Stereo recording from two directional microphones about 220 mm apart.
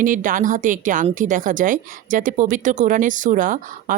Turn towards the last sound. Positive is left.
turn(degrees=-35)  # may be behind; listen again after turning